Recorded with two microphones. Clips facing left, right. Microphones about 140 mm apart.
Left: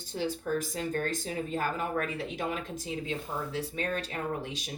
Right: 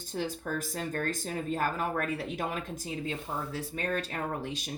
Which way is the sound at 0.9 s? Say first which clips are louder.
Even; 45° right (ahead or behind).